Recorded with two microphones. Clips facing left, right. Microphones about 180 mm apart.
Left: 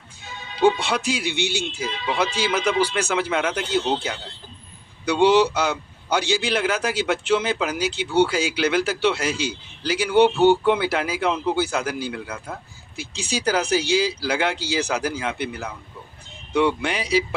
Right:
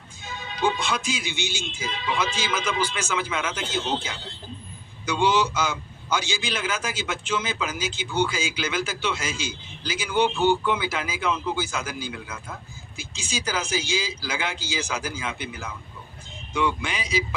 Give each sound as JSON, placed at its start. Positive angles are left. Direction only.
{"t": 0.6, "sound": "a man's voice", "side_deg": 65}